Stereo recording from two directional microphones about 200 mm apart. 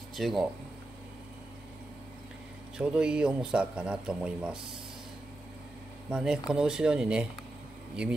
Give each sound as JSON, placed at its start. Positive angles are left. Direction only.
{"t": 0.1, "sound": "speech", "side_deg": 0}
{"t": 2.8, "sound": "a man's voice", "side_deg": -5}
{"t": 6.0, "sound": "a man's voice", "side_deg": -5}